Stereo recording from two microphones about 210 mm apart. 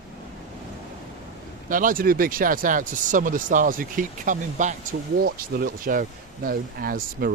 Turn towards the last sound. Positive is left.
turn(degrees=-45)  # may be behind; listen again after turning